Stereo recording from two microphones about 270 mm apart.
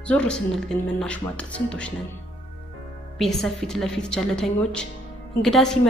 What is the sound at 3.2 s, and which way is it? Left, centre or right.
A woman's voice, centre.